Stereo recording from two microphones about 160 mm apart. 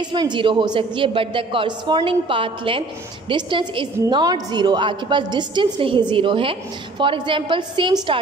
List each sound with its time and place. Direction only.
0.0 s a woman's voice: 30° right (ahead or behind)